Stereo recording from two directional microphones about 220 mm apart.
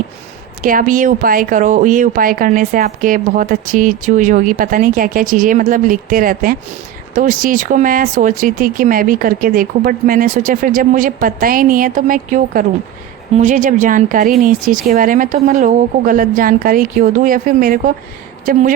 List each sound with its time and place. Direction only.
0.6 s speech: 40° right (ahead or behind)